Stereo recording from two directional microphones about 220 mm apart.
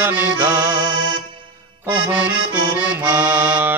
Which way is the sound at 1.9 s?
5° right (ahead or behind).